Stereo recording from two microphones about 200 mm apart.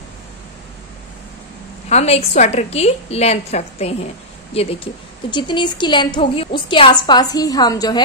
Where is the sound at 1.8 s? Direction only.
35° left (ahead or behind).